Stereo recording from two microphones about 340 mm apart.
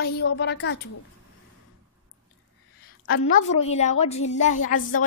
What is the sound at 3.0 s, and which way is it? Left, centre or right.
Speech, left.